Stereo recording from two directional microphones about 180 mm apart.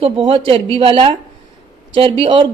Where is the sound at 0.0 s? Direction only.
30° right (ahead or behind).